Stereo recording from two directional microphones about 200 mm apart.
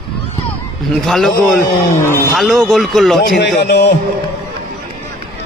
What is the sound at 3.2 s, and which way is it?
Speech, 50° left (ahead or behind).